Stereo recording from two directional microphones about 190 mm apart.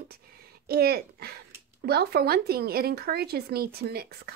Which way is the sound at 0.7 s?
55° right (ahead or behind).